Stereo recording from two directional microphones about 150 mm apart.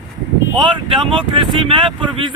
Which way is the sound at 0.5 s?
35° right (ahead or behind).